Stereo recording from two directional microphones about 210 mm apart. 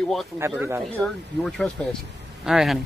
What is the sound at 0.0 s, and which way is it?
Speech, centre (ahead or behind).